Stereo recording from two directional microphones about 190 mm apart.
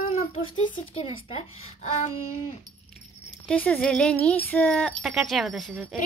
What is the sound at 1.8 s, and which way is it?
Speech, 35° left (ahead or behind).